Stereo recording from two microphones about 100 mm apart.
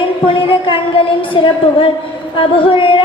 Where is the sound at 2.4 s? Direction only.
60° left (ahead or behind).